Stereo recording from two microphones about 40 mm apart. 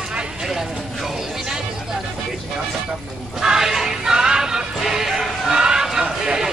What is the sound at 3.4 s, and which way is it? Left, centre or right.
Music, centre.